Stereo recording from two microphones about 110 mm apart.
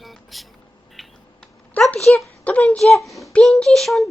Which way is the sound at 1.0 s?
Centre (ahead or behind).